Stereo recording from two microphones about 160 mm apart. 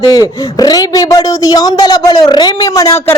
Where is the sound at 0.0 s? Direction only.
25° left (ahead or behind).